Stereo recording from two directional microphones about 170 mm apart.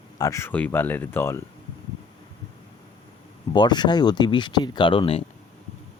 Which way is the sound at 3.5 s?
25° left (ahead or behind).